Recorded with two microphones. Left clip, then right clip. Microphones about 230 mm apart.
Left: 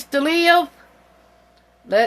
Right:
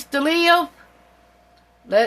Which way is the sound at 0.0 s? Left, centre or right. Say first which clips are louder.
Left 1 dB; left.